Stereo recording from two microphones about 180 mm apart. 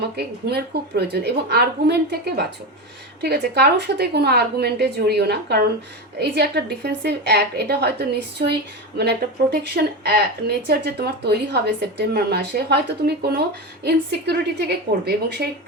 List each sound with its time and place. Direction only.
0.2 s a woman's voice: 65° right (ahead or behind)